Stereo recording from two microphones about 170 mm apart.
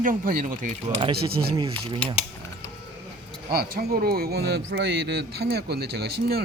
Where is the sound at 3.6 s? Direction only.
60° right (ahead or behind).